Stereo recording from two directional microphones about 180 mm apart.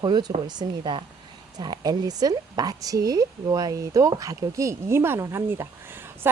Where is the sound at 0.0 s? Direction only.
25° right (ahead or behind).